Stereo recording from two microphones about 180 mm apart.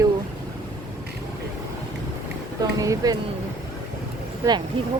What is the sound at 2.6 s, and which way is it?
Speech, 20° right (ahead or behind).